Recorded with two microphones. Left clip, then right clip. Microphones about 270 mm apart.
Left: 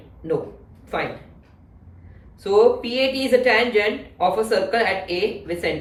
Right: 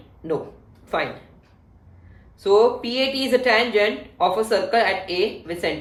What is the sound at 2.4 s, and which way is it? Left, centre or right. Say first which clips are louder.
Speech: left 1 dB; right.